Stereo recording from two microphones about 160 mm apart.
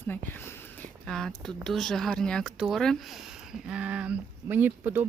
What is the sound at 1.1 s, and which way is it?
Speech, 5° left (ahead or behind).